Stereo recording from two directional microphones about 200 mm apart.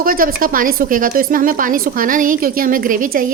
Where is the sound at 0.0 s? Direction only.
45° right (ahead or behind).